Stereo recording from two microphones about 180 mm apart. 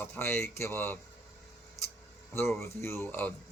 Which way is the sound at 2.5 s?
15° left (ahead or behind).